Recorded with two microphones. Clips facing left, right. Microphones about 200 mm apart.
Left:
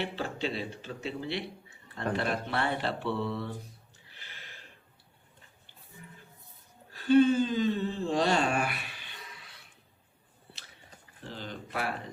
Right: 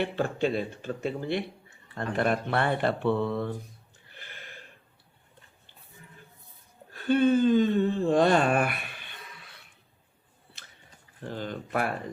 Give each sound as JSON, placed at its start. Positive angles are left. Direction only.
{"t": 0.0, "sound": "speech", "side_deg": -50}
{"t": 4.1, "sound": "a sound", "side_deg": -50}
{"t": 6.9, "sound": "speech", "side_deg": -55}
{"t": 11.3, "sound": "speech", "side_deg": -50}